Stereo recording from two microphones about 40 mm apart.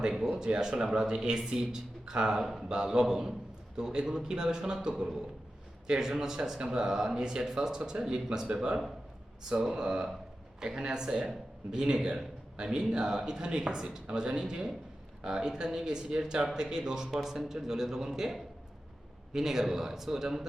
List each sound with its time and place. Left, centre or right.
0.3 s speech: centre
2.4 s speech: centre
2.6 s speech: centre
9.7 s speech: right
17.2 s speech: centre